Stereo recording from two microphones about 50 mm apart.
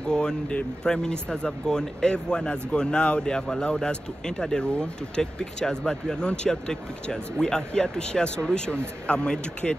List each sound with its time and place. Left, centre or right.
0.1 s speech: centre